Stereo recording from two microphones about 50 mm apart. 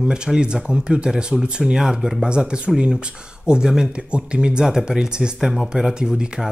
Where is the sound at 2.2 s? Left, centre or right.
Centre.